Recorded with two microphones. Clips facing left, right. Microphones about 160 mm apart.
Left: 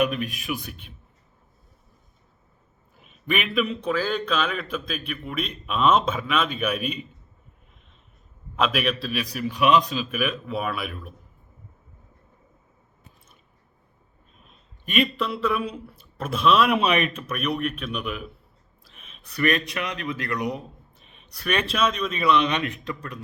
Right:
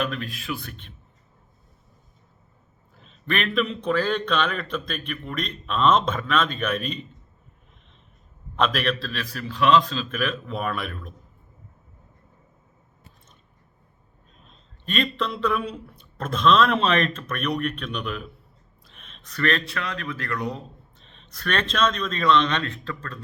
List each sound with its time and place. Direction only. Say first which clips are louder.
0.0 s a man's voice: left 4 dB; 15° left (ahead or behind)
3.0 s a man's voice: even; 10° left (ahead or behind)
8.5 s a man's voice: even; 5° left (ahead or behind)
14.3 s a man's voice: right 1 dB; 5° left (ahead or behind)